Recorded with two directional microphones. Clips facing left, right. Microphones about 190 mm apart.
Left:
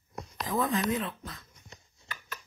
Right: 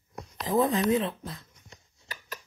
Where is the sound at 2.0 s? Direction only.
40° right (ahead or behind).